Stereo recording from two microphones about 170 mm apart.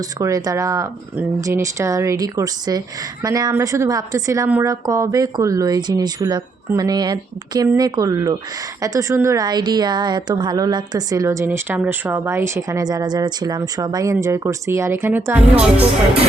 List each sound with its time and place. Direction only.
0.2 s a woman's voice: 20° right (ahead or behind)